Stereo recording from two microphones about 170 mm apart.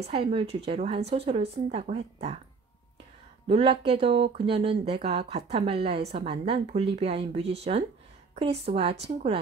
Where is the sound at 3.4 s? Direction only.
35° right (ahead or behind).